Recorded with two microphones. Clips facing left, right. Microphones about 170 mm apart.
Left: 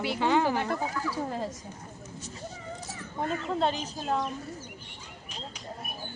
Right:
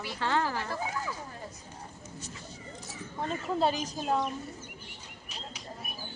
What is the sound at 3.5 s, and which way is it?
Speech, 5° right (ahead or behind).